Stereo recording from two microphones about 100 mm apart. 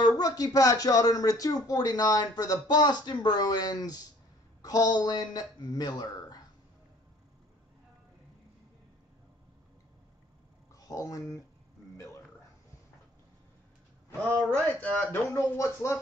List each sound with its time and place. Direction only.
0.0 s speech: 40° left (ahead or behind)
10.7 s speech: 35° left (ahead or behind)
14.5 s speech: 15° left (ahead or behind)